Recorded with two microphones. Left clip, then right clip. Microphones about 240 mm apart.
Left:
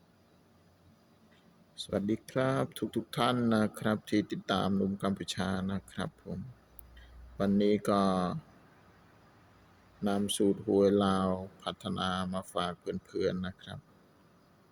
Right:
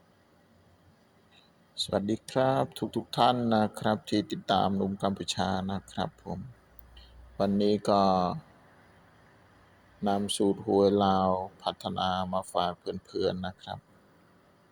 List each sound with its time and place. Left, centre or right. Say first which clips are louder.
1.7 s speech: right 4 dB; centre
10.0 s speech: right 3 dB; centre